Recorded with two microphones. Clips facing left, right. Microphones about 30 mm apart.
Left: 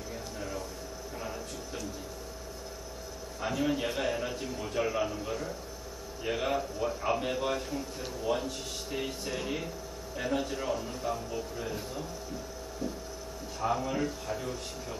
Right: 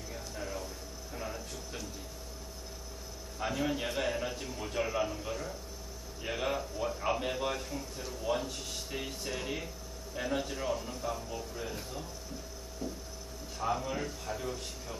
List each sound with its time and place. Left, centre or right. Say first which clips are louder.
0.4 s a sound: even; centre
3.3 s a man's voice: left 3 dB; centre
13.6 s a man's voice: left 3 dB; centre